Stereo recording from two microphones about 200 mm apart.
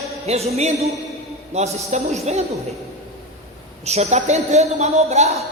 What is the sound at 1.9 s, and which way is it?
Speech, 35° right (ahead or behind).